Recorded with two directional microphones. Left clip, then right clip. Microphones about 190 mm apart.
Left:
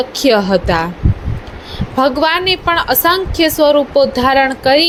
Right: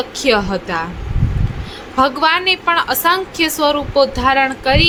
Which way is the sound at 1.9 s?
15° left (ahead or behind).